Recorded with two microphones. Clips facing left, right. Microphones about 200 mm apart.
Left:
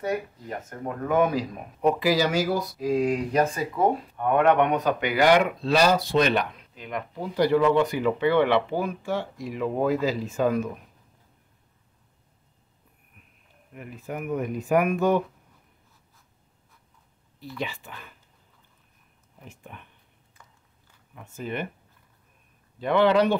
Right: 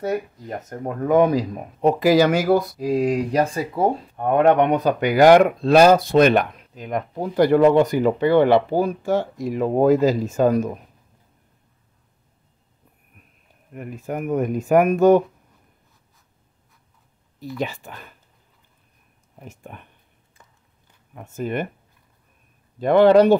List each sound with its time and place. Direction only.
0.1 s speech: 40° right (ahead or behind)
2.0 s speech: 55° right (ahead or behind)
2.8 s speech: 35° right (ahead or behind)
13.7 s speech: 45° right (ahead or behind)
17.6 s speech: 45° right (ahead or behind)
19.4 s speech: 45° right (ahead or behind)
21.1 s speech: 50° right (ahead or behind)
22.8 s speech: 45° right (ahead or behind)